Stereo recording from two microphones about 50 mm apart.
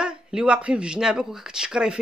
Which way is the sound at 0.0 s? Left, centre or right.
Centre.